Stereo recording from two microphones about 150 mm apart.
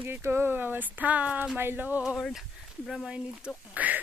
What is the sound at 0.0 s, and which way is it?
Speech, 15° right (ahead or behind).